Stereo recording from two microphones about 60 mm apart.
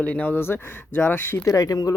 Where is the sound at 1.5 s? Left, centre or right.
Left.